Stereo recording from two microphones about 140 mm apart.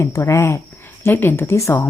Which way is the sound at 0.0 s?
20° left (ahead or behind).